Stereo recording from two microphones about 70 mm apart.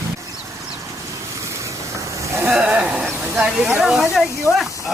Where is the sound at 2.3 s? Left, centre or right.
Right.